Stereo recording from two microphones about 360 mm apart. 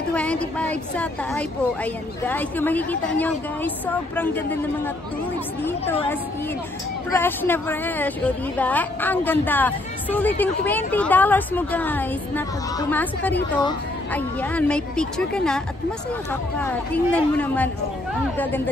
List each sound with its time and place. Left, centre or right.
0.1 s a woman's voice: centre
5.6 s a woman's voice: centre